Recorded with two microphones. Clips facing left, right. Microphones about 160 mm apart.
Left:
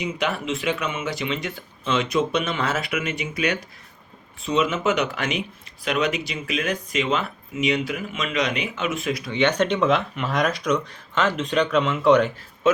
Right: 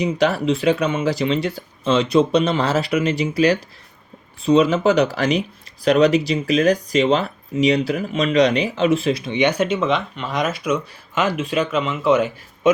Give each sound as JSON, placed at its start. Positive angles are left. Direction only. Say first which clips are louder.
{"t": 0.0, "sound": "speech", "louder": "right 8 dB", "side_deg": -35}
{"t": 12.7, "sound": "a man's voice", "louder": "right 4 dB", "side_deg": -15}